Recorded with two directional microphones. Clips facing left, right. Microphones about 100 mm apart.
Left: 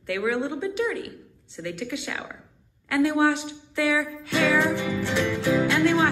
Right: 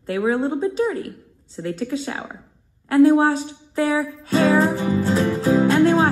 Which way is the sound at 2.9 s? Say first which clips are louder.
Right 7 dB; 35° right (ahead or behind).